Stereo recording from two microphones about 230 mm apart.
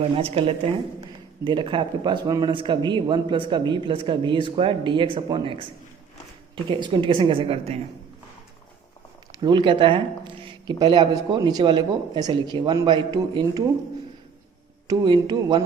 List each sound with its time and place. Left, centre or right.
0.2 s speech: right
6.7 s speech: right
9.4 s speech: right
14.8 s speech: centre